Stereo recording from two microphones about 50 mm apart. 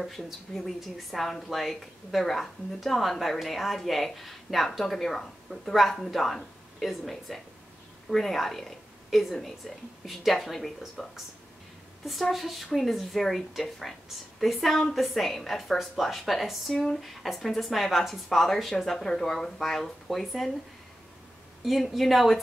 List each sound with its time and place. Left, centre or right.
0.0 s a woman's voice: centre
21.6 s a woman's voice: centre